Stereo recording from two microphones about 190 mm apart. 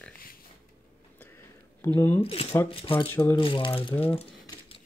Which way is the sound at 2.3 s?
30° left (ahead or behind).